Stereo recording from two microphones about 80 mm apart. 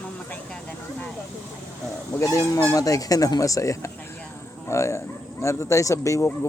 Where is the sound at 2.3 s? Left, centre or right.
Left.